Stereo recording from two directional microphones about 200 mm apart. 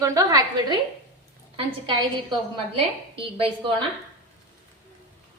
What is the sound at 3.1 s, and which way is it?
Speech, 25° right (ahead or behind).